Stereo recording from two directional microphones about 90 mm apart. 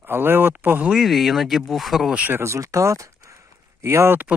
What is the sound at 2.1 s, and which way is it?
Speech, 15° right (ahead or behind).